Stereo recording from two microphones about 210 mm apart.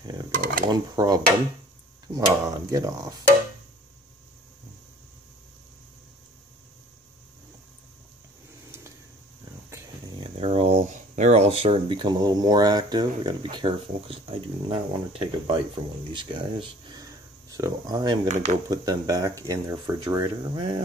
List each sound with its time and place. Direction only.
0.7 s dishes: 20° right (ahead or behind)
2.1 s speech: 15° right (ahead or behind)
9.7 s speech: 15° right (ahead or behind)
18.3 s speech: 35° right (ahead or behind)
18.7 s speech: 15° right (ahead or behind)